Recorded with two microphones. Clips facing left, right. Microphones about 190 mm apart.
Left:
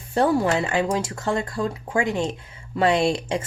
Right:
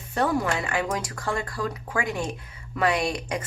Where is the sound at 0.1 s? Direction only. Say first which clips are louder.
Left 5 dB; 25° left (ahead or behind).